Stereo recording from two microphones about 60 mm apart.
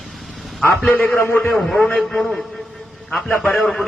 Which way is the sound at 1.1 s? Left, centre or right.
Left.